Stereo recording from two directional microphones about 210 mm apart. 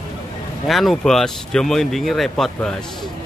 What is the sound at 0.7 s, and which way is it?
Speech, centre (ahead or behind).